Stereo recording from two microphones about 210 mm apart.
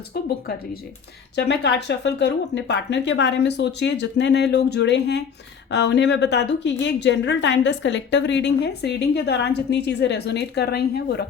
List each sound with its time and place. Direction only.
0.1 s a woman's voice: 45° left (ahead or behind)